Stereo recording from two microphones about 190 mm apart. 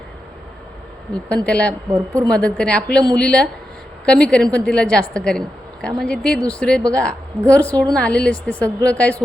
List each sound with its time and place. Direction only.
1.5 s a woman's voice: 5° left (ahead or behind)
1.9 s speech: 15° right (ahead or behind)
2.3 s a woman's voice: 5° left (ahead or behind)